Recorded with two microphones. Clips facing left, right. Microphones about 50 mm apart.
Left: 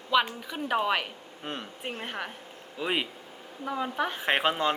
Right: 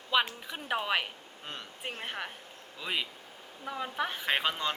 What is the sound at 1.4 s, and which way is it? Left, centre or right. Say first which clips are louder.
Speech: left 6 dB; centre.